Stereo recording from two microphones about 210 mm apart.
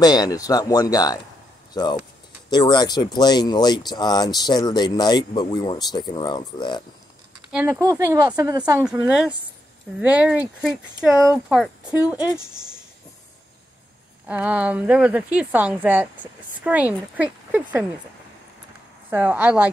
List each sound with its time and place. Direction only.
0.0 s speech: 20° left (ahead or behind)
7.5 s a woman's voice: 10° right (ahead or behind)
8.8 s a woman's voice: 5° right (ahead or behind)
14.2 s a woman's voice: 5° right (ahead or behind)
19.0 s a woman's voice: 5° right (ahead or behind)